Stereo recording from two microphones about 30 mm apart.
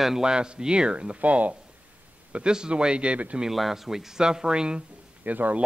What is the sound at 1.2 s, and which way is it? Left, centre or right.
Speech, right.